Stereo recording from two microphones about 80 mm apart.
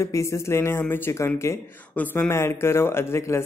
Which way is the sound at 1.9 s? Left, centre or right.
Left.